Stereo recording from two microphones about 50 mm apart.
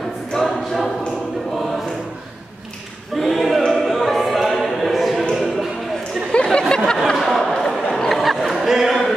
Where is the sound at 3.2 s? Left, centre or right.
Centre.